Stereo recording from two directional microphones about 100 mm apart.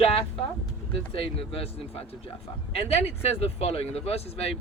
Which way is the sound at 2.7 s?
90° left.